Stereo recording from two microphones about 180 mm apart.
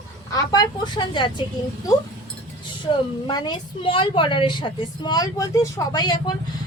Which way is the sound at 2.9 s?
25° left (ahead or behind).